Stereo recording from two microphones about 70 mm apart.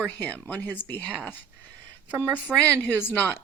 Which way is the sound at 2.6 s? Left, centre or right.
Left.